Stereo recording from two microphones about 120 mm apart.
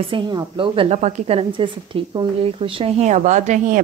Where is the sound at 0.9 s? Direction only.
70° right (ahead or behind).